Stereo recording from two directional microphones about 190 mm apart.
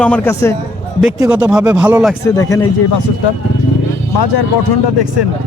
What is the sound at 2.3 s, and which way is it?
Speech, 20° left (ahead or behind).